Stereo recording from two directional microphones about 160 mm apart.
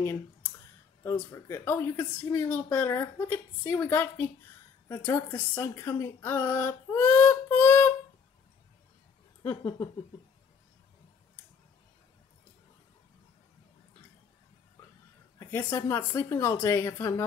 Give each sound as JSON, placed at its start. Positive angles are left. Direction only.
{"t": 0.0, "sound": "a woman's voice", "side_deg": 15}
{"t": 14.8, "sound": "a sound", "side_deg": 20}
{"t": 15.3, "sound": "a woman's voice", "side_deg": 15}